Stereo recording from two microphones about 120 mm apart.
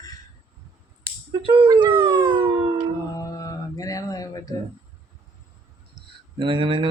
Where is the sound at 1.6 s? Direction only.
40° right (ahead or behind).